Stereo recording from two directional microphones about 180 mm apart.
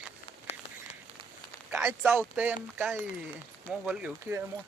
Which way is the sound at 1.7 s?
5° right (ahead or behind).